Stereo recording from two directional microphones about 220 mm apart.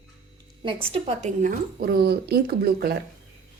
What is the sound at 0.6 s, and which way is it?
A woman's voice, 25° right (ahead or behind).